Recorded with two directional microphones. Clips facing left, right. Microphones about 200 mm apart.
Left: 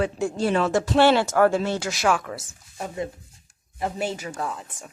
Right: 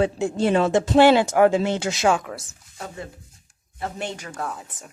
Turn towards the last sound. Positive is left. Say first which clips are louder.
# left 1 dB
turn(degrees=0)  # may be behind; listen again after turning